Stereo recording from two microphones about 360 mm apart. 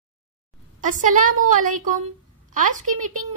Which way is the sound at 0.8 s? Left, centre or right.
Right.